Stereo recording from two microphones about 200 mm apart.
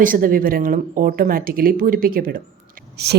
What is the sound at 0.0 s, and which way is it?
A woman's voice, 45° right (ahead or behind).